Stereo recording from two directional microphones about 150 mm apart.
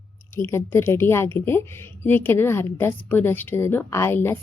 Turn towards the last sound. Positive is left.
turn(degrees=15)  # may be behind; listen again after turning